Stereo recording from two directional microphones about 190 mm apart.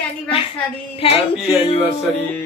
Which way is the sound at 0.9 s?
30° left (ahead or behind).